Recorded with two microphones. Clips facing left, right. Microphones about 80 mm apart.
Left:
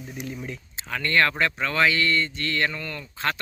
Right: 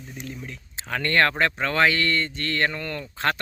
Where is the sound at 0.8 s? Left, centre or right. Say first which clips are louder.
Right 1 dB; right.